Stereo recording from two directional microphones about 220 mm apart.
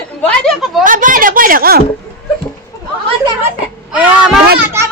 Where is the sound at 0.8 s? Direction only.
35° right (ahead or behind).